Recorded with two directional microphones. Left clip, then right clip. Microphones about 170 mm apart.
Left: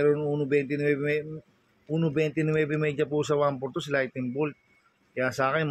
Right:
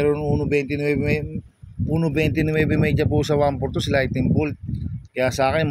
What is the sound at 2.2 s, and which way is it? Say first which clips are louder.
Speech: right 5 dB; 50° right (ahead or behind).